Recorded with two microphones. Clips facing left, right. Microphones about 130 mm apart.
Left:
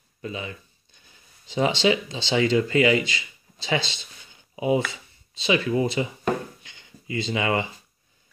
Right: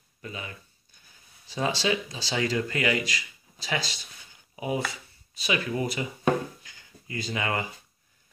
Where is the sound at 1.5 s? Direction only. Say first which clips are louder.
Left 6 dB; 20° left (ahead or behind).